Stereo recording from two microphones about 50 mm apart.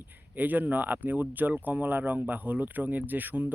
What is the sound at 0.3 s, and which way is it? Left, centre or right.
Speech, right.